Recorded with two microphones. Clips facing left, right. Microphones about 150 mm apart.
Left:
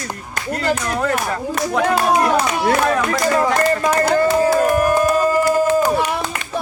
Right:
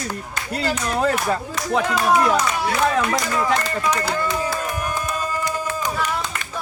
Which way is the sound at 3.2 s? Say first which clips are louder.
Left 6 dB; 50° left (ahead or behind).